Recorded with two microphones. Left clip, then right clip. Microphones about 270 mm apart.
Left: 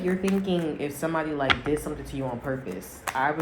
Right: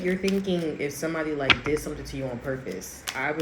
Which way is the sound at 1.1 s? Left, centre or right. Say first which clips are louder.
Left 1 dB; centre.